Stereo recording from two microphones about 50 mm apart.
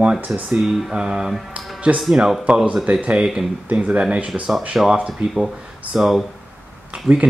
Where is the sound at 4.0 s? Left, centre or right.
Right.